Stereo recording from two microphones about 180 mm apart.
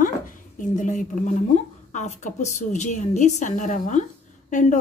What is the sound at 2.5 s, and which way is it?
A woman's voice, 40° left (ahead or behind).